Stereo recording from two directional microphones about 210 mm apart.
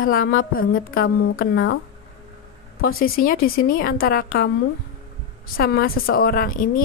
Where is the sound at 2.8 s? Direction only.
45° left (ahead or behind).